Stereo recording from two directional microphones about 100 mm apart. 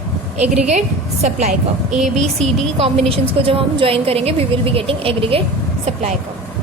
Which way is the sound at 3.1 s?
65° right (ahead or behind).